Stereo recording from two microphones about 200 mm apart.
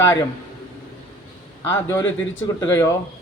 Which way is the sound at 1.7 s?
15° left (ahead or behind).